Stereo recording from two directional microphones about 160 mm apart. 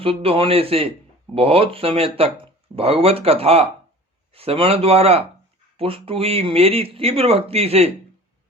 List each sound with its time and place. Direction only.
0.0 s speech: 35° right (ahead or behind)